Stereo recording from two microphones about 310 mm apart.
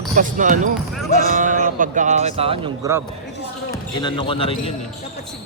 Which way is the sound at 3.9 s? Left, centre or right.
Centre.